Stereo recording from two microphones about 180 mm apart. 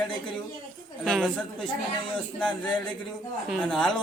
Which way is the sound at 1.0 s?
Centre (ahead or behind).